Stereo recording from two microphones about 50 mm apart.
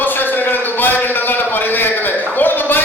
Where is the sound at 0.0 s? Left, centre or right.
Left.